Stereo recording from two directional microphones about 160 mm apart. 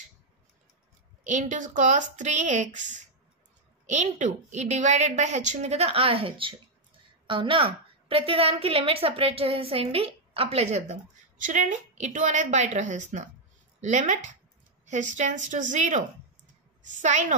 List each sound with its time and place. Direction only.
1.2 s a woman's voice: 50° right (ahead or behind)